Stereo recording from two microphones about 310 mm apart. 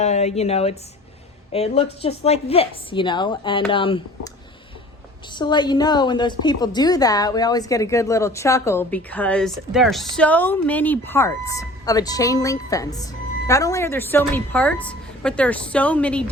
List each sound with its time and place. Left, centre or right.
0.0 s a woman's voice: left
5.3 s a woman's voice: centre